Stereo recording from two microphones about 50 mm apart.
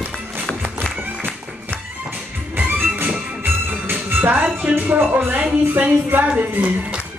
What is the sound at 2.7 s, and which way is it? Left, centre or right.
Music, right.